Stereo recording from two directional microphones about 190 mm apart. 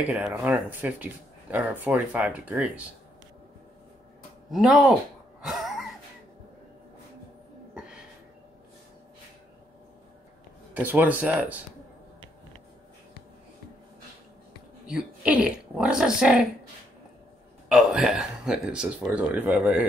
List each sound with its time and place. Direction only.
0.1 s speech: 5° right (ahead or behind)
4.5 s speech: centre (ahead or behind)
5.4 s a sound: centre (ahead or behind)
10.7 s speech: 10° right (ahead or behind)
14.9 s speech: 5° right (ahead or behind)
17.6 s speech: 5° right (ahead or behind)